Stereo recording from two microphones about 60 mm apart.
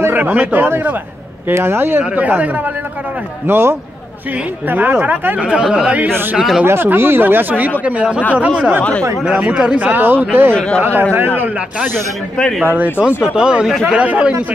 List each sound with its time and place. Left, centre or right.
0.1 s speech: right
1.5 s speech: right
3.4 s speech: right
4.6 s speech: right
5.5 s speech: centre
6.6 s speech: right
7.8 s speech: centre
9.8 s speech: right
13.2 s speech: centre